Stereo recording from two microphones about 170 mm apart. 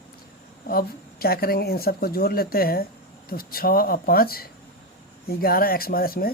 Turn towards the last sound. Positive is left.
turn(degrees=60)  # may be behind; listen again after turning